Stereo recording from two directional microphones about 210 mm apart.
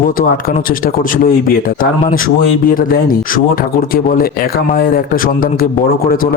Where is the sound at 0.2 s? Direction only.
40° left (ahead or behind).